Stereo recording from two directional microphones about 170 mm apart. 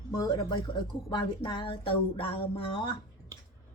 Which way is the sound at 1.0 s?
30° left (ahead or behind).